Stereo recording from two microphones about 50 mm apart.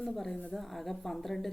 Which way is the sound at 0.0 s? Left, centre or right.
Centre.